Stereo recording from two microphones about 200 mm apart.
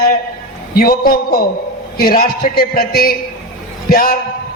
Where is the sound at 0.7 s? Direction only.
50° left (ahead or behind).